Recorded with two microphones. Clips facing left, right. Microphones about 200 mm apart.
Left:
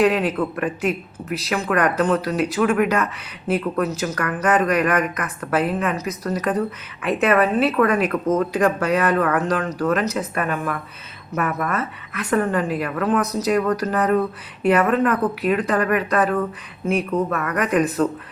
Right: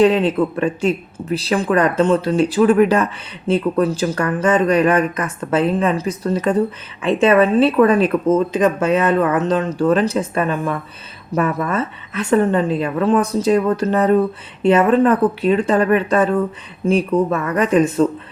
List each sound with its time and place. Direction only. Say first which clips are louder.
0.0 s speech: right 5 dB; 25° right (ahead or behind)